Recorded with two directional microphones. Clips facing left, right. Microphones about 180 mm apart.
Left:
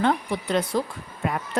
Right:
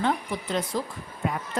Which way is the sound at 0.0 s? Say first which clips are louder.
Left 4 dB; 65° left (ahead or behind).